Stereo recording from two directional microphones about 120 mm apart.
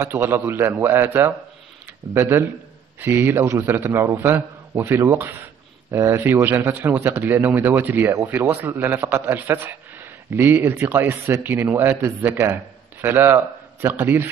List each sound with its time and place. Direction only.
0.0 s a man's voice: 20° right (ahead or behind)